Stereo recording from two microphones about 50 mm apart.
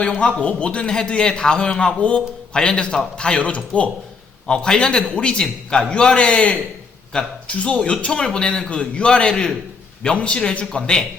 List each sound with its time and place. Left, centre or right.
0.2 s a man's voice: left